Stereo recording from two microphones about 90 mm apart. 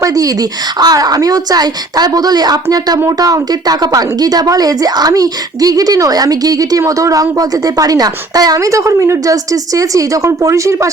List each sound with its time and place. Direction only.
0.0 s a woman's voice: 40° right (ahead or behind)